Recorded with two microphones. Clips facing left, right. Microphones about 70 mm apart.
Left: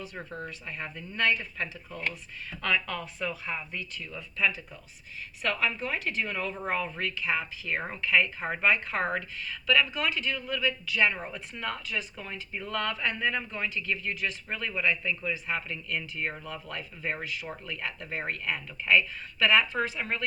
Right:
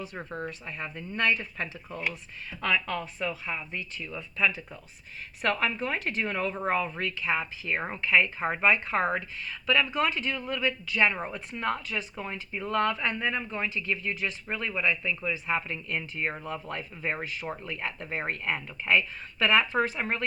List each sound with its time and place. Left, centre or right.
0.3 s speech: right
2.8 s speech: right
3.2 s speech: centre
3.7 s speech: right